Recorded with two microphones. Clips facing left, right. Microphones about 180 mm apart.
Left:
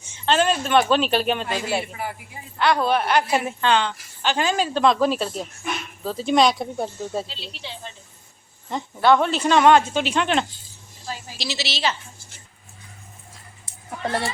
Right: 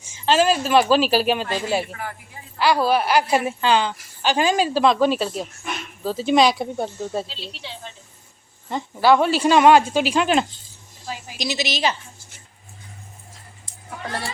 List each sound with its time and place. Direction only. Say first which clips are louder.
0.1 s speech: right 2 dB; 5° right (ahead or behind)
1.9 s speech: left 2 dB; 15° left (ahead or behind)
2.6 s a woman's voice: right 1 dB; 5° right (ahead or behind)